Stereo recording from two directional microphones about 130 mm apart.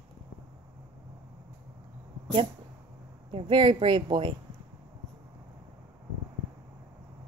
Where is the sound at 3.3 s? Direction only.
40° right (ahead or behind).